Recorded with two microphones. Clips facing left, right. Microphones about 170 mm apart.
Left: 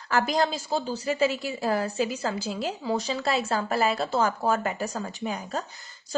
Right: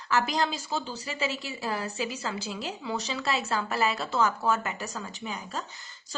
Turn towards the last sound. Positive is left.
turn(degrees=45)  # may be behind; listen again after turning